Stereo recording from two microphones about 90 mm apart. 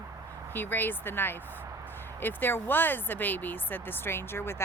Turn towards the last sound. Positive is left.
turn(degrees=25)  # may be behind; listen again after turning